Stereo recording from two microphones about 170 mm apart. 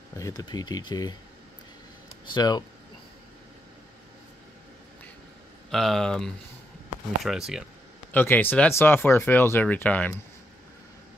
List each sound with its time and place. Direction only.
0.2 s speech: 20° left (ahead or behind)
2.3 s speech: 25° left (ahead or behind)
5.7 s speech: centre (ahead or behind)
8.1 s speech: 10° left (ahead or behind)